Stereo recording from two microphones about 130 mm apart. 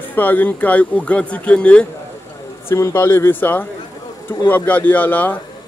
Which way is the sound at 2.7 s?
20° left (ahead or behind).